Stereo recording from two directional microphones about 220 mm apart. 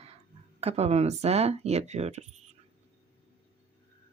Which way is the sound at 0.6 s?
30° right (ahead or behind).